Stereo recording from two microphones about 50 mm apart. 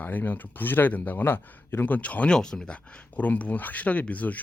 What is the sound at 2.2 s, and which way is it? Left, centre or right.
Speech, centre.